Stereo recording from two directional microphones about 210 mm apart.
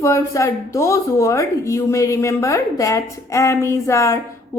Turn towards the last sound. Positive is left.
turn(degrees=15)  # may be behind; listen again after turning